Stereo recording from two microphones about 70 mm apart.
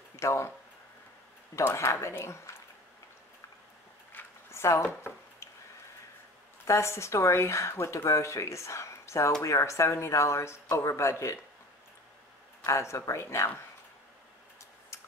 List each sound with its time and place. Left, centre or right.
0.1 s speech: left
1.5 s speech: left
4.5 s a sound: left
6.6 s speech: left
12.6 s speech: left